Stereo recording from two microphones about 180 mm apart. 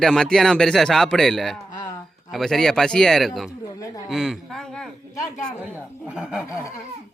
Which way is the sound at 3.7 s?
20° left (ahead or behind).